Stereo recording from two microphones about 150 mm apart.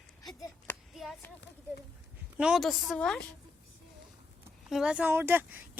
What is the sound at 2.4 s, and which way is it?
Speech, centre (ahead or behind).